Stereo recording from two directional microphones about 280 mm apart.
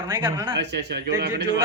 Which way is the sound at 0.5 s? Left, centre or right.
Right.